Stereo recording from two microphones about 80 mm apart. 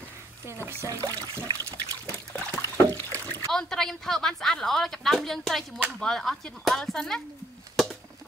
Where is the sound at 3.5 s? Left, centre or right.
Centre.